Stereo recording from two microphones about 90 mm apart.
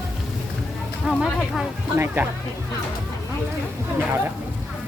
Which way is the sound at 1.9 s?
25° right (ahead or behind).